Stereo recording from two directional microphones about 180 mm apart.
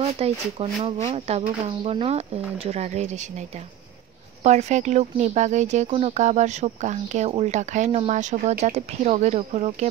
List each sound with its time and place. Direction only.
0.2 s speech: 35° right (ahead or behind)